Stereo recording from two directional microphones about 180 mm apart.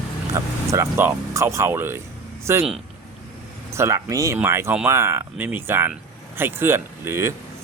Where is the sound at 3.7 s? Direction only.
15° right (ahead or behind).